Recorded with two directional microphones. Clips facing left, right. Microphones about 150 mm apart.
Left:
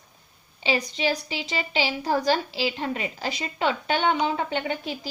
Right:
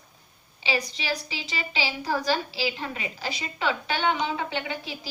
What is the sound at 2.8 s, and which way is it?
A woman's voice, 40° left (ahead or behind).